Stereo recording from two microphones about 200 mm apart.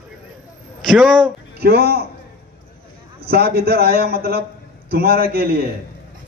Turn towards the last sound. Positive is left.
turn(degrees=-50)  # may be behind; listen again after turning